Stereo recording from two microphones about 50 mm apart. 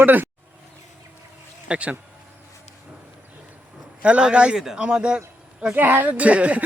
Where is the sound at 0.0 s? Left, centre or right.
Right.